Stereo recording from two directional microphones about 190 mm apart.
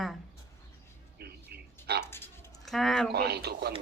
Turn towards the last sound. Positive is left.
turn(degrees=-60)  # may be behind; listen again after turning